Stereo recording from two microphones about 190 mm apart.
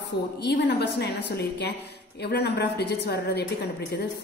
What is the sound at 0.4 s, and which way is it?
A woman's voice, 60° left (ahead or behind).